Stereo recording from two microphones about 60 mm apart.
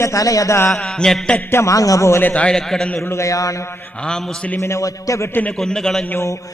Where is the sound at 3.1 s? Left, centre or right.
Left.